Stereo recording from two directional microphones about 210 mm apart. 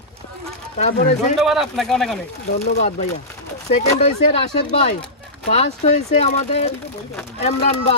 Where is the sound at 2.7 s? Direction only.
30° left (ahead or behind).